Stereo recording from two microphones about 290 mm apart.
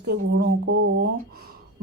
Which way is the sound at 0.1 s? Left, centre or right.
Right.